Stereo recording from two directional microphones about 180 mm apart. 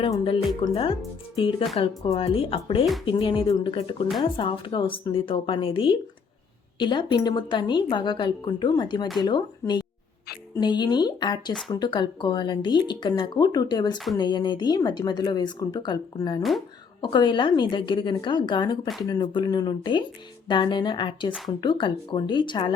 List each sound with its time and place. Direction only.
0.0 s a woman's voice: 25° left (ahead or behind)
16.4 s speech: centre (ahead or behind)
17.0 s a woman's voice: 25° left (ahead or behind)